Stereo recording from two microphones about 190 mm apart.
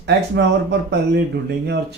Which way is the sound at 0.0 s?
65° right (ahead or behind).